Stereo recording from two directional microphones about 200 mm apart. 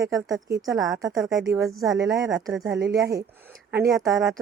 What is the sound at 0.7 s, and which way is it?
Speech, centre (ahead or behind).